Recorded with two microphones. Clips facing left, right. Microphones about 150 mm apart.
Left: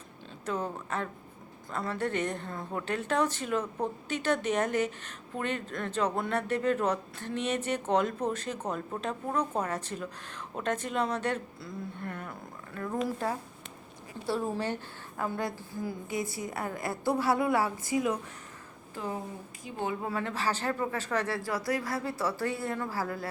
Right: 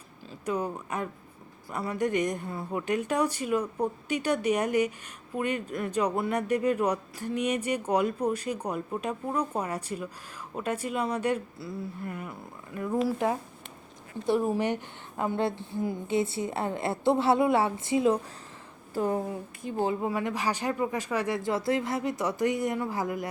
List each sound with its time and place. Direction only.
0.4 s a woman's voice: 15° right (ahead or behind)
14.3 s a woman's voice: 15° right (ahead or behind)
19.6 s speech: 50° right (ahead or behind)
20.0 s a woman's voice: 15° right (ahead or behind)